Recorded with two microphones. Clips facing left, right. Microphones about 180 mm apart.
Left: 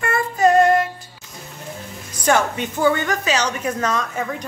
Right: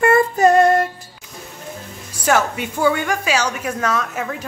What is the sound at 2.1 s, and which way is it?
A woman's voice, 5° right (ahead or behind).